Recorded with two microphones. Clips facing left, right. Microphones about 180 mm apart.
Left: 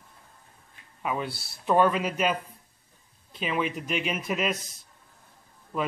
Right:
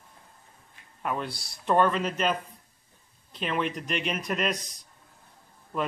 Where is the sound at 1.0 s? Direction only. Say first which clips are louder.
Left 1 dB; 5° left (ahead or behind).